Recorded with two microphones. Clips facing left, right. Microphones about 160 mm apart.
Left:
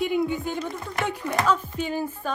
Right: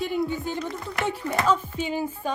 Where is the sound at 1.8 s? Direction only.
15° right (ahead or behind).